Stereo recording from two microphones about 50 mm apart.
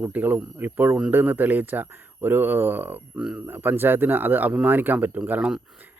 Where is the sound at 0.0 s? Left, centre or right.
Right.